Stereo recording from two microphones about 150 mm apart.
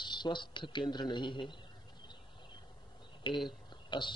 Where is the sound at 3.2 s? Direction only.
35° left (ahead or behind).